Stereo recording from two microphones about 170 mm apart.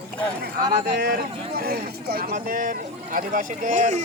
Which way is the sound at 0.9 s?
70° right (ahead or behind).